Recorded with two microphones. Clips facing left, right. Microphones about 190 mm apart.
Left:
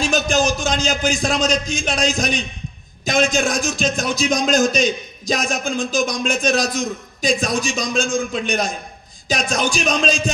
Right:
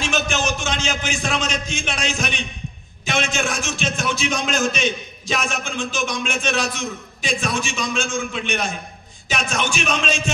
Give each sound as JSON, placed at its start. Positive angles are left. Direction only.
{"t": 0.0, "sound": "a man's voice", "side_deg": 35}